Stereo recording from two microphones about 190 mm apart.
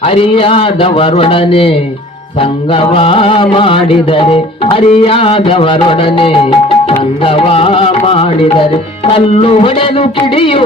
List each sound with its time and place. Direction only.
0.0 s mantra: 30° left (ahead or behind)